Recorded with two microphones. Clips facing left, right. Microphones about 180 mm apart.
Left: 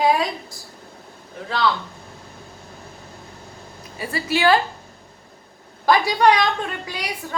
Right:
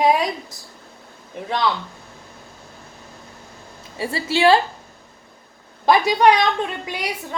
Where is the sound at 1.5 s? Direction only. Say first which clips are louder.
Even; 20° right (ahead or behind).